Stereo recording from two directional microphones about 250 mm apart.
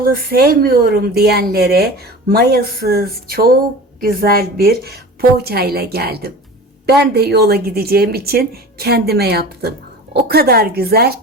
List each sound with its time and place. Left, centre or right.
0.0 s a woman's voice: right